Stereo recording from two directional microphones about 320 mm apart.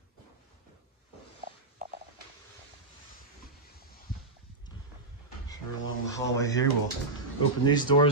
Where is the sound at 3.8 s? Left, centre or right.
Left.